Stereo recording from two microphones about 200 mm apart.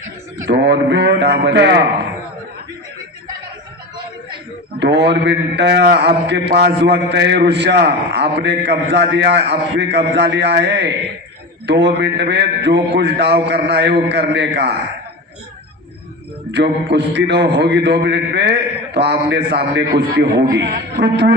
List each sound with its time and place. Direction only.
0.5 s a man's voice: 60° right (ahead or behind)
4.8 s a man's voice: 60° right (ahead or behind)
16.5 s a man's voice: 60° right (ahead or behind)